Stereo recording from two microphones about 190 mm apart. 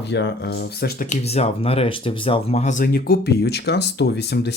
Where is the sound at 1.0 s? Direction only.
35° left (ahead or behind).